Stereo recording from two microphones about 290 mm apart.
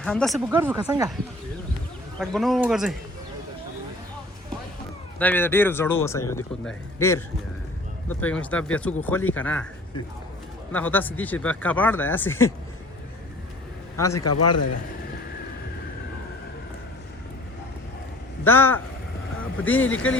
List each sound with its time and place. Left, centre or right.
0.0 s speech: centre
2.1 s speech: centre
5.2 s speech: centre
8.2 s speech: centre
10.7 s speech: centre
13.9 s a man's voice: centre
14.3 s speech: left
18.4 s speech: centre